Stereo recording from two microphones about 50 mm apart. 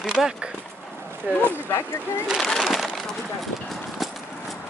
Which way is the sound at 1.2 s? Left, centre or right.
Right.